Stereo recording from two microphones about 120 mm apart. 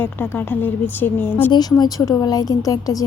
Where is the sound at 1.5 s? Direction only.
35° left (ahead or behind).